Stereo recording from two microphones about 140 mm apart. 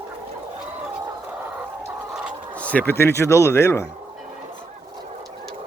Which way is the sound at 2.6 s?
10° left (ahead or behind).